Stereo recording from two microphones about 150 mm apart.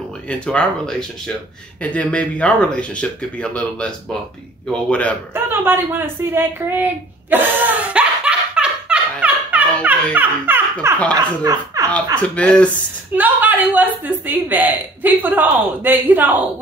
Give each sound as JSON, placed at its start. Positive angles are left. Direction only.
{"t": 0.3, "sound": "speech", "side_deg": 5}
{"t": 5.3, "sound": "a sound", "side_deg": -15}
{"t": 9.8, "sound": "speech", "side_deg": -10}
{"t": 12.2, "sound": "speech", "side_deg": 10}
{"t": 13.1, "sound": "a woman's voice", "side_deg": -10}